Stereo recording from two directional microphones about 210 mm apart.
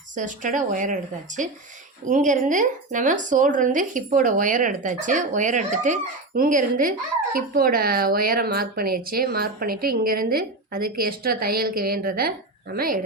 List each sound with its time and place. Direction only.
0.2 s a woman's voice: 40° right (ahead or behind)